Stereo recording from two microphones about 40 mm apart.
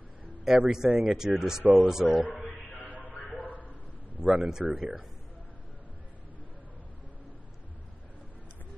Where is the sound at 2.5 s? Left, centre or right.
Left.